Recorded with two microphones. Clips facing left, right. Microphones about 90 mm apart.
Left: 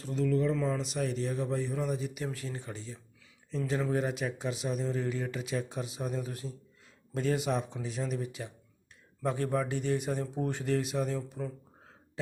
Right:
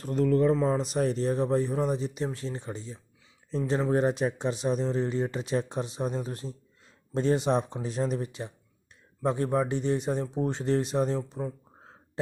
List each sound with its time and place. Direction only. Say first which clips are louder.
0.0 s a man's voice: right 5 dB; 50° right (ahead or behind); by 3.0 s 20° right (ahead or behind)
3.7 s a man's voice: right 6 dB; 30° right (ahead or behind)
9.2 s speech: right 4 dB; 25° right (ahead or behind)